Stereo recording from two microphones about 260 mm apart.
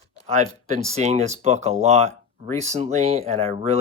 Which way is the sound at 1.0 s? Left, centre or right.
Right.